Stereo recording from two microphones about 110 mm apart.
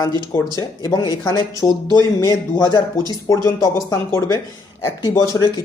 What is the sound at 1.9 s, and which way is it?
Speech, 35° left (ahead or behind).